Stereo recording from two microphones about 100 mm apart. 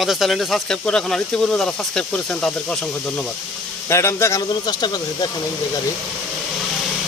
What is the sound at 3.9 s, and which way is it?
Speech, 25° left (ahead or behind).